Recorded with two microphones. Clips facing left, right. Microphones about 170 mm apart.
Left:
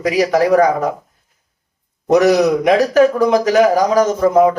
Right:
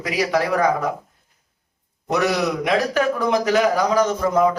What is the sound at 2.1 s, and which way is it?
A man's voice, 40° left (ahead or behind).